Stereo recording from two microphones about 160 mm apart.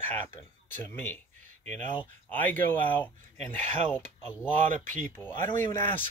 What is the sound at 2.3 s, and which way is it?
Speech, 10° left (ahead or behind).